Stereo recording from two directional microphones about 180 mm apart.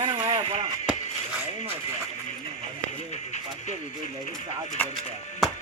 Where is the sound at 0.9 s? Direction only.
5° right (ahead or behind).